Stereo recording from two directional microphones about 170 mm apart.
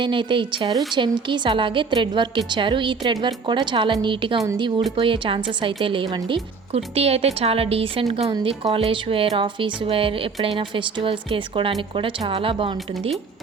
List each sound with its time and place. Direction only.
0.0 s a woman's voice: 30° right (ahead or behind)